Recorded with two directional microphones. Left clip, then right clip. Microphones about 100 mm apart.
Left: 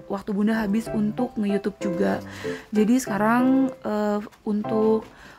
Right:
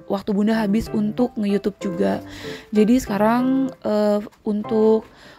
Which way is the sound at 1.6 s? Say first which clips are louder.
Right 2 dB; 20° right (ahead or behind).